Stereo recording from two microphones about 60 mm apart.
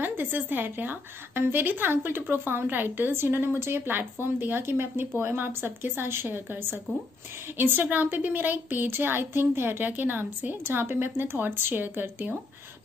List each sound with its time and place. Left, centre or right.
0.0 s a woman's voice: right